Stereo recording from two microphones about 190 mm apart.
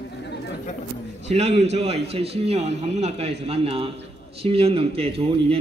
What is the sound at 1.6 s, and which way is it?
A man's voice, 35° right (ahead or behind).